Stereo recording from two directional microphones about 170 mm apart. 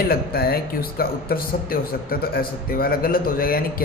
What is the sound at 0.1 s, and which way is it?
Speech, 65° left (ahead or behind).